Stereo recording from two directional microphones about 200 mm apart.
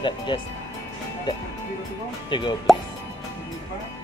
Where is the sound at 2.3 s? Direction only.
25° left (ahead or behind).